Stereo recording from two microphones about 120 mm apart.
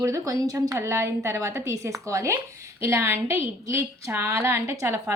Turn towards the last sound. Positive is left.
turn(degrees=-25)  # may be behind; listen again after turning